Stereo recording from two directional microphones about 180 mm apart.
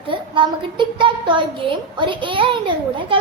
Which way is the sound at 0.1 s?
25° right (ahead or behind).